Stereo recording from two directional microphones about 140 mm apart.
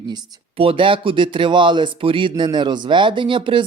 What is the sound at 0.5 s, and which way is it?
Speech, 40° right (ahead or behind).